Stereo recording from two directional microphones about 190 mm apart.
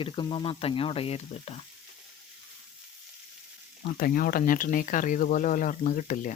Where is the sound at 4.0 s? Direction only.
50° left (ahead or behind).